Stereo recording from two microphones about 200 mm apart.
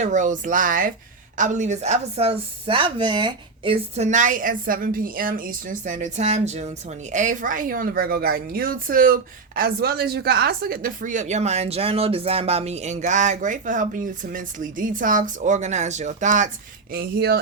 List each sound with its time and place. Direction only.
0.0 s speech: 40° right (ahead or behind)
16.9 s speech: 50° right (ahead or behind)